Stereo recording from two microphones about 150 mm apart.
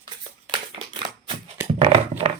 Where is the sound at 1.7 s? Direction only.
40° right (ahead or behind).